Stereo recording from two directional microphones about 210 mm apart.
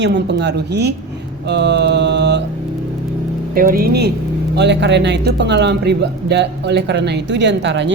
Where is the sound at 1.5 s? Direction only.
55° right (ahead or behind).